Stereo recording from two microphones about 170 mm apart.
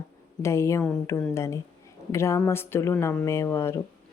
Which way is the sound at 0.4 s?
15° left (ahead or behind).